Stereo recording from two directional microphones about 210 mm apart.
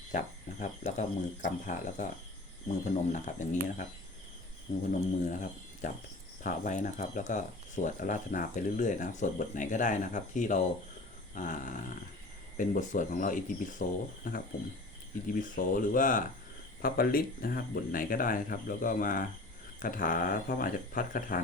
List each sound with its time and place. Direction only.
0.1 s speech: 35° left (ahead or behind)